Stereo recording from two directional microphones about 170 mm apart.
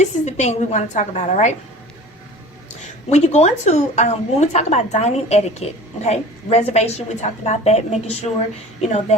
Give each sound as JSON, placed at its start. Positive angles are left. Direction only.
{"t": 0.0, "sound": "a woman's voice", "side_deg": 40}
{"t": 3.1, "sound": "a woman's voice", "side_deg": 40}